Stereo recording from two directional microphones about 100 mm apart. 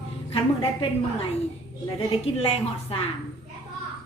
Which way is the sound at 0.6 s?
60° left (ahead or behind).